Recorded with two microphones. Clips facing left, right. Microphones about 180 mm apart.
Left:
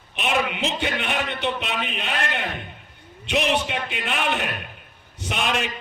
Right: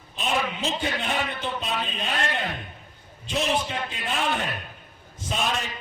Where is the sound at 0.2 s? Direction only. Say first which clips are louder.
Left 3 dB; 70° left (ahead or behind).